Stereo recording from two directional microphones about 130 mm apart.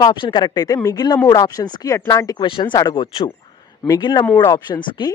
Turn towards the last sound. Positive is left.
turn(degrees=30)  # may be behind; listen again after turning